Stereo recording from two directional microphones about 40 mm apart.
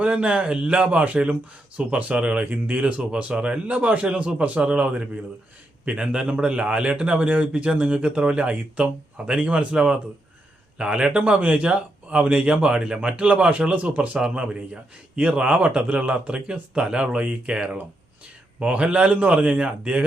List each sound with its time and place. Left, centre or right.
0.0 s a man's voice: right
3.7 s a man's voice: right
12.4 s a man's voice: right